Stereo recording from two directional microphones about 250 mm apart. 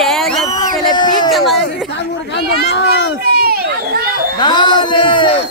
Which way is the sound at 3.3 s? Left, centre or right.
Right.